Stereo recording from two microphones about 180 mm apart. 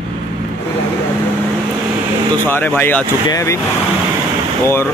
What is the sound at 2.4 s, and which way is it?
Speech, 10° left (ahead or behind).